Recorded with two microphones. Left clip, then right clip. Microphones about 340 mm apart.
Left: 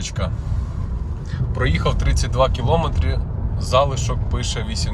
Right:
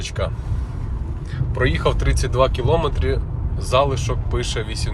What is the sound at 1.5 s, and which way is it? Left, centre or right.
Speech, centre.